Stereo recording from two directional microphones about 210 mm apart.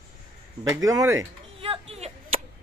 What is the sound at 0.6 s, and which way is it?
Speech, 15° right (ahead or behind).